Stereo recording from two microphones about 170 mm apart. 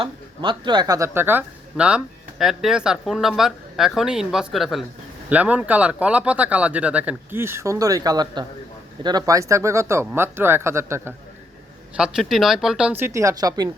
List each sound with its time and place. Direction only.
0.0 s speech: 30° right (ahead or behind)
11.9 s speech: 5° right (ahead or behind); by 13.7 s 20° right (ahead or behind)